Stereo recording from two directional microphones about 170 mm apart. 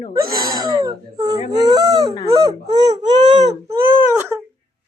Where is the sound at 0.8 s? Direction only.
25° right (ahead or behind).